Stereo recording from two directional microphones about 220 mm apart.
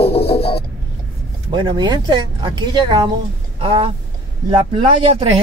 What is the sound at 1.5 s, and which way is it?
Speech, 20° right (ahead or behind).